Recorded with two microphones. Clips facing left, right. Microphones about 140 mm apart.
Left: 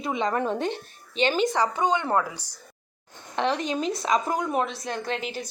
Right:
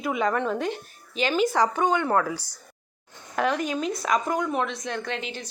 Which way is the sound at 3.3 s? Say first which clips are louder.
Right 1 dB; 25° left (ahead or behind).